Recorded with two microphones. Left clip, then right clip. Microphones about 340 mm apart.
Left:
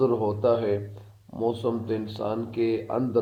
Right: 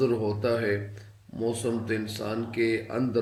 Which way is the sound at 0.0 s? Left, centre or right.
Centre.